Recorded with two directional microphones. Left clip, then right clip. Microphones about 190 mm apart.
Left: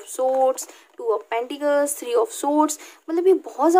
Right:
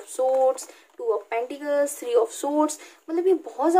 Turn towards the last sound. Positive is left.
turn(degrees=35)  # may be behind; listen again after turning